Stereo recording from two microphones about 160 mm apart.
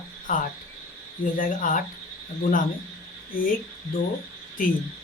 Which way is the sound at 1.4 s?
55° left (ahead or behind).